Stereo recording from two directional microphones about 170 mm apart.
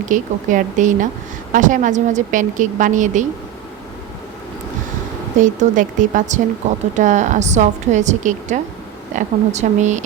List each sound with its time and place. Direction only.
0.1 s a woman's voice: 50° right (ahead or behind)
5.4 s a woman's voice: 50° right (ahead or behind)